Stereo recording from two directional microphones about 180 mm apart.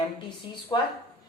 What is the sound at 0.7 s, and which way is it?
Speech, 25° left (ahead or behind).